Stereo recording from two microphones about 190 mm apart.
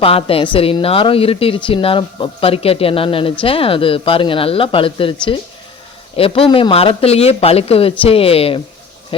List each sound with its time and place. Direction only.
0.0 s a woman's voice: 30° left (ahead or behind)
6.1 s a woman's voice: 30° left (ahead or behind)